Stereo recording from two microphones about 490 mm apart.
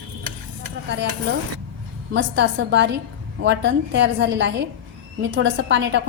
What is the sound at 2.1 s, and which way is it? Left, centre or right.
A woman's voice, right.